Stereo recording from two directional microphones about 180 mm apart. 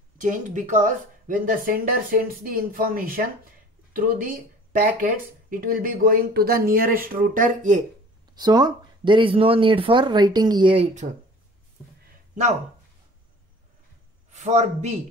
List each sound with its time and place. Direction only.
0.2 s speech: 45° right (ahead or behind)
8.4 s speech: 25° right (ahead or behind)
14.3 s a man's voice: 40° right (ahead or behind)